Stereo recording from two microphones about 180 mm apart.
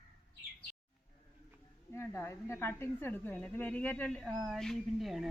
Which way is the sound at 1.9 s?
15° left (ahead or behind).